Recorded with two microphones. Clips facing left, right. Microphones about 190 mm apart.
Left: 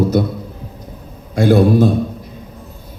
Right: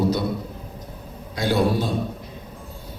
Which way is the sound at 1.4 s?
55° left (ahead or behind).